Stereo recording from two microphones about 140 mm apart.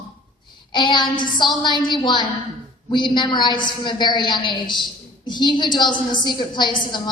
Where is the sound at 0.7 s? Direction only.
35° left (ahead or behind).